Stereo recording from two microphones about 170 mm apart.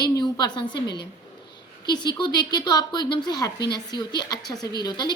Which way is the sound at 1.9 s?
25° left (ahead or behind).